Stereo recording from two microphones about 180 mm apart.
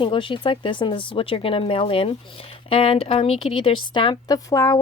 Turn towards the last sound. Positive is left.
turn(degrees=20)  # may be behind; listen again after turning